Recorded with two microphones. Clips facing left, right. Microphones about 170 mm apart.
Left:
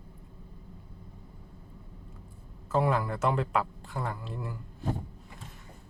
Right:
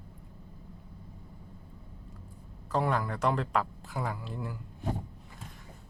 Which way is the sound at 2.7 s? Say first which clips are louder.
Left 2 dB; 5° left (ahead or behind).